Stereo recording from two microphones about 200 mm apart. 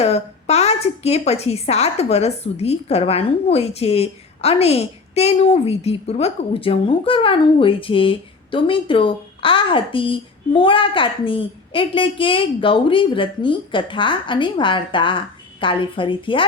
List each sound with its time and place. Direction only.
0.0 s a woman's voice: 30° left (ahead or behind)